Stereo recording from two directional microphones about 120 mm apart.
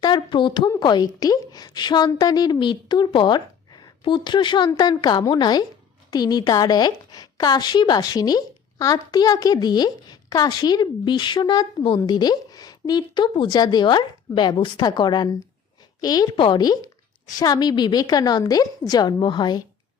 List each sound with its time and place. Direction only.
0.0 s a woman's voice: 40° left (ahead or behind)
16.3 s a woman's voice: 40° left (ahead or behind)